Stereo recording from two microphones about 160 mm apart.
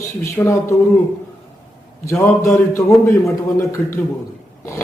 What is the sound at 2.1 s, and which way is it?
Speech, 15° left (ahead or behind).